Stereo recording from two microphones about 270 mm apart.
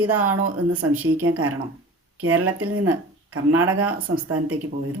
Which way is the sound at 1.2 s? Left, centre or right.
Right.